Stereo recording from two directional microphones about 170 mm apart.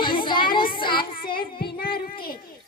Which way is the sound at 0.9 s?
60° left (ahead or behind).